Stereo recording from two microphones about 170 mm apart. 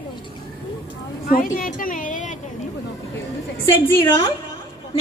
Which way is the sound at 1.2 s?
55° left (ahead or behind).